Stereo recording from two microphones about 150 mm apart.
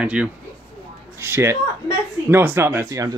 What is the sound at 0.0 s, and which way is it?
A child's voice, 10° right (ahead or behind).